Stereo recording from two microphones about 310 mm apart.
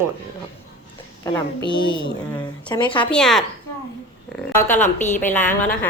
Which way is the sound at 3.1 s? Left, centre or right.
Centre.